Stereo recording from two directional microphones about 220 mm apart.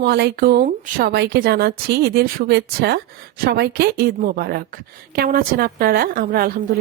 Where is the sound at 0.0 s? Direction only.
50° right (ahead or behind).